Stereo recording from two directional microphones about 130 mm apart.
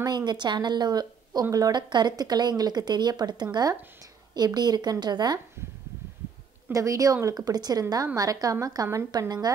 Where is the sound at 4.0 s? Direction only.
30° right (ahead or behind).